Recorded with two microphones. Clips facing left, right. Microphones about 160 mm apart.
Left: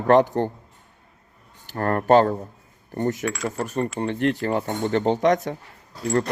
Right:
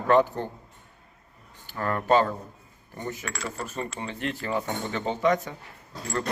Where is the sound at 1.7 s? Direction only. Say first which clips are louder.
Left 6 dB; 50° left (ahead or behind).